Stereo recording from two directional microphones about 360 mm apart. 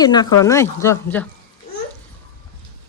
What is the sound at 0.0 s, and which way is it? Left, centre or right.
Speech, centre.